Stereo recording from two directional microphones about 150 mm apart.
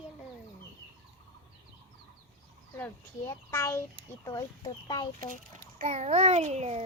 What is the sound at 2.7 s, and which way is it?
Speech, 15° left (ahead or behind).